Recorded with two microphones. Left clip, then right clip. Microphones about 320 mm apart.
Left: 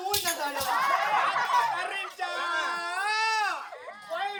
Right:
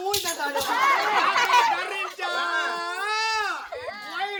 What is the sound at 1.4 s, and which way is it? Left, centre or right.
Chatter, right.